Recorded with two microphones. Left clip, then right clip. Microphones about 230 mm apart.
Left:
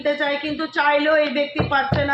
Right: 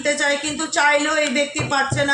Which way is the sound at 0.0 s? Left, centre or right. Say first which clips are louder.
Right 2 dB; right.